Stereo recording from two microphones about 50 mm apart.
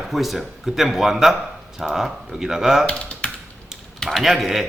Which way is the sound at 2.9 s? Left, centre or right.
Left.